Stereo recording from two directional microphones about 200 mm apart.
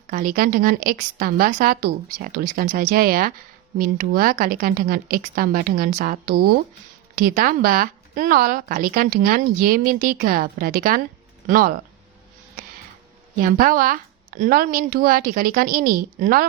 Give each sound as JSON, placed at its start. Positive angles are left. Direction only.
{"t": 0.1, "sound": "a woman's voice", "side_deg": -45}
{"t": 13.3, "sound": "a woman's voice", "side_deg": -45}